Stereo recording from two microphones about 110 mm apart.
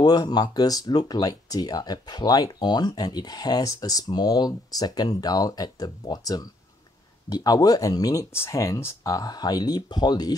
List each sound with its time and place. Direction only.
0.0 s speech: 40° left (ahead or behind)